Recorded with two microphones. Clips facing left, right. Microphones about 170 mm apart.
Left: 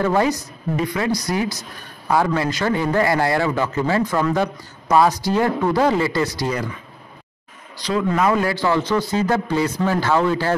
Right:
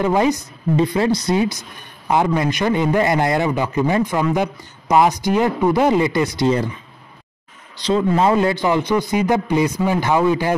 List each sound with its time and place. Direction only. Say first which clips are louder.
0.0 s a man's voice: right 2 dB; 20° right (ahead or behind)
0.7 s a man's voice: right 4 dB; 30° right (ahead or behind)
7.8 s a man's voice: right 3 dB; 25° right (ahead or behind)